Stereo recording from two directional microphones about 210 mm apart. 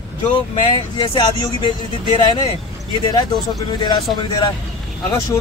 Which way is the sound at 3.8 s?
20° left (ahead or behind).